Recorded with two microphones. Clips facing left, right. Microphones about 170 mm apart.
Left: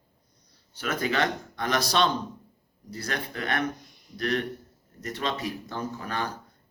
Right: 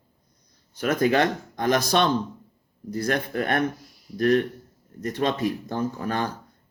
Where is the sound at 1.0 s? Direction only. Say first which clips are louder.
Right 6 dB; 50° right (ahead or behind).